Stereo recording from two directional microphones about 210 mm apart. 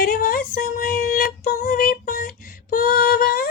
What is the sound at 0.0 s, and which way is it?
Female singing, 40° left (ahead or behind).